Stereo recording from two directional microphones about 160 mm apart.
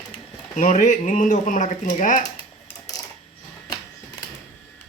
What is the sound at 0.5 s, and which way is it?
Speech, 50° left (ahead or behind).